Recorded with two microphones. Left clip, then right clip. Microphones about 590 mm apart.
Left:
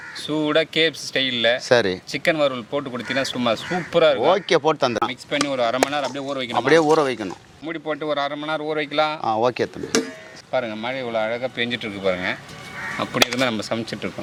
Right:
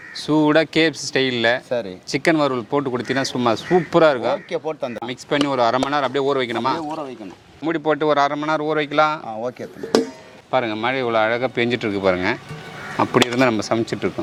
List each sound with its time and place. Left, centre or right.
0.3 s speech: right
1.7 s speech: left
2.1 s speech: right
4.4 s speech: left
5.0 s speech: right
6.8 s speech: left
7.6 s speech: right; by 9.1 s centre
9.2 s speech: left
10.5 s speech: right
13.0 s speech: right